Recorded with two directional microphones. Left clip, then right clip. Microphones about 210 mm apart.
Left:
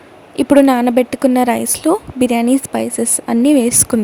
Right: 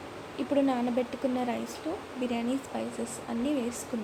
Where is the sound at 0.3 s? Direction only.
55° left (ahead or behind).